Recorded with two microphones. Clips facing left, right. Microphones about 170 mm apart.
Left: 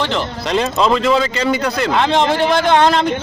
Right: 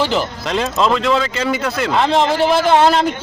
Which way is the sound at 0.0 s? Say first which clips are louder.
Right 1 dB; 5° right (ahead or behind).